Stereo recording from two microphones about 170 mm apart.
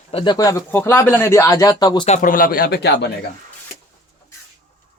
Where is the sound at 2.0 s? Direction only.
50° left (ahead or behind); by 3.1 s 75° left (ahead or behind).